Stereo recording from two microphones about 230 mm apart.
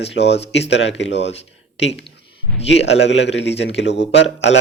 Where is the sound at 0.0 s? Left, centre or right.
Left.